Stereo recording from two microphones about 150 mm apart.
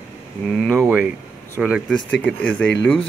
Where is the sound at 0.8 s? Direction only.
10° right (ahead or behind).